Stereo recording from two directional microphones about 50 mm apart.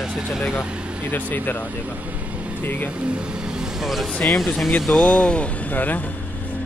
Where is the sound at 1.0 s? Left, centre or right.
Left.